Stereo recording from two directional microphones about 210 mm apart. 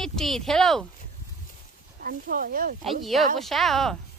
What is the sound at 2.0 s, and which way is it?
Speech, 45° right (ahead or behind).